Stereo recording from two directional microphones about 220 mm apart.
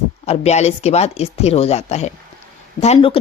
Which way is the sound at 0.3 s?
30° left (ahead or behind).